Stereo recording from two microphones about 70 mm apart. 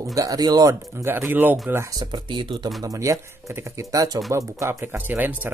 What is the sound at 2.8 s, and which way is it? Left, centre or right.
Speech, right.